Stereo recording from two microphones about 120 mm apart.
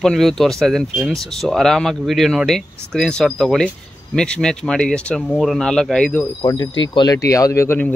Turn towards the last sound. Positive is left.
turn(degrees=20)  # may be behind; listen again after turning